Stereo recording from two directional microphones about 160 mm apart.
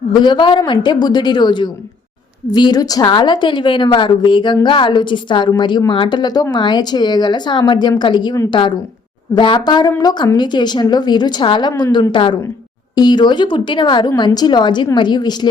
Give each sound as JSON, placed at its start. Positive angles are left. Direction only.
{"t": 0.2, "sound": "a woman's voice", "side_deg": 30}